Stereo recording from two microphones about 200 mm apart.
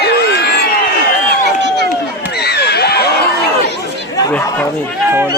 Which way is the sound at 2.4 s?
55° left (ahead or behind).